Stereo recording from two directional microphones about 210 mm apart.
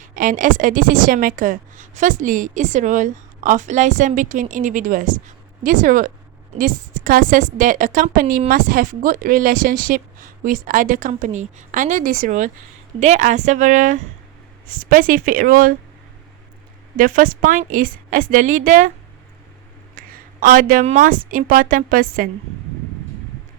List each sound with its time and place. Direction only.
0.0 s a woman's voice: 40° right (ahead or behind)
17.0 s a woman's voice: 40° right (ahead or behind)
20.0 s a woman's voice: 40° right (ahead or behind)